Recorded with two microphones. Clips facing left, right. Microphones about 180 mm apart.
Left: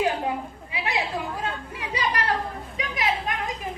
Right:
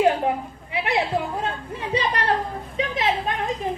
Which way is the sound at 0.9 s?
25° right (ahead or behind).